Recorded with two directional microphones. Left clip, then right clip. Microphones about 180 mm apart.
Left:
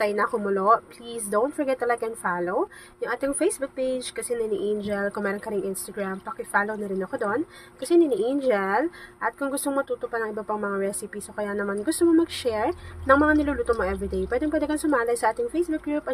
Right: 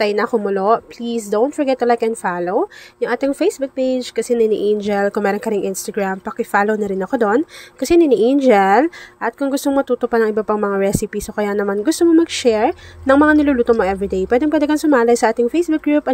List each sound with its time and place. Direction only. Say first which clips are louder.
0.0 s a woman's voice: right 7 dB; 35° right (ahead or behind)